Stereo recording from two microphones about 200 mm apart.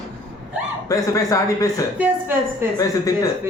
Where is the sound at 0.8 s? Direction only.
15° left (ahead or behind).